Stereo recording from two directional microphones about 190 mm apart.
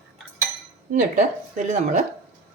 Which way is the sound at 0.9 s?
40° right (ahead or behind).